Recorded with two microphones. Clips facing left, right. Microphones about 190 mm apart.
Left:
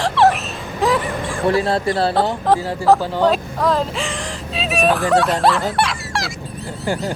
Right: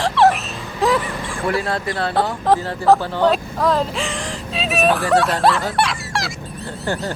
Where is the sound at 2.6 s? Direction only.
10° left (ahead or behind).